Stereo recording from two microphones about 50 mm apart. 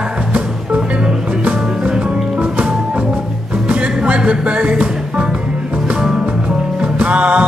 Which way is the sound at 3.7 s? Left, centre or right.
Right.